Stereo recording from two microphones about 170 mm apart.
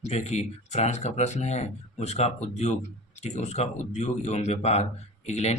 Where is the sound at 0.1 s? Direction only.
40° left (ahead or behind).